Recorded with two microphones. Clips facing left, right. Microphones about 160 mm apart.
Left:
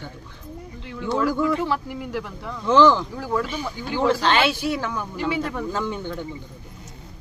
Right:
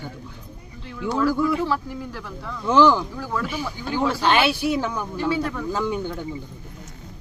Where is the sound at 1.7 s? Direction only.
15° left (ahead or behind).